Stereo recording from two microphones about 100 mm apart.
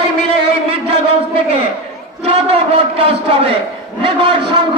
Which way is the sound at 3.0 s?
70° right (ahead or behind).